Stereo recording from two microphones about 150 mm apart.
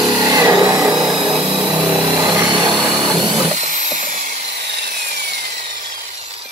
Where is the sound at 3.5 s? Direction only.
55° right (ahead or behind).